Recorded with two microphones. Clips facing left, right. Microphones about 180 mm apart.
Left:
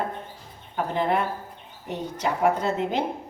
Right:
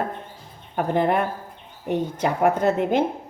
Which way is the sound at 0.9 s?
55° right (ahead or behind).